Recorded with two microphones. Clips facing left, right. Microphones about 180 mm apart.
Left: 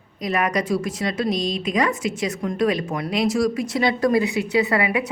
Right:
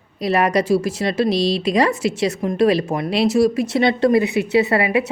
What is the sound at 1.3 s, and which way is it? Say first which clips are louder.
Speech: right 6 dB; 80° right.